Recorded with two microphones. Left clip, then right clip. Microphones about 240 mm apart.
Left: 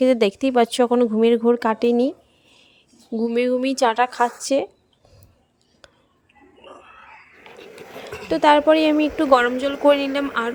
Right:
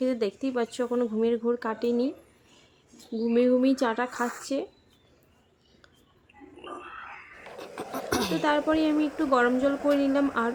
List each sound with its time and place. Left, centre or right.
0.0 s speech: left
3.2 s speech: left
8.3 s speech: left